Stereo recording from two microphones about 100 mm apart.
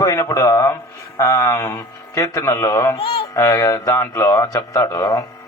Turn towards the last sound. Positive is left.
turn(degrees=35)  # may be behind; listen again after turning